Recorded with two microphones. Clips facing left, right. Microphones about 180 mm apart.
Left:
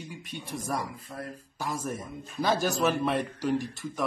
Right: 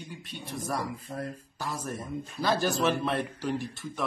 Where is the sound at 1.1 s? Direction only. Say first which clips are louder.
Right 5 dB; 35° right (ahead or behind).